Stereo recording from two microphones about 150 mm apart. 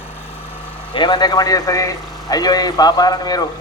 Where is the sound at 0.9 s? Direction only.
30° left (ahead or behind).